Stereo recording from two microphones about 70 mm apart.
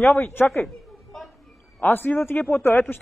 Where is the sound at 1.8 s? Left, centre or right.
Left.